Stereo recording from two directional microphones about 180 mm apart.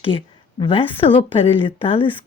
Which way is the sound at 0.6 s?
30° left (ahead or behind).